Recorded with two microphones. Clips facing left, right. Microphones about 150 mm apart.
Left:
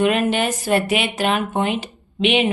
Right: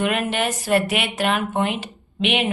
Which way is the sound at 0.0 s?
Centre (ahead or behind).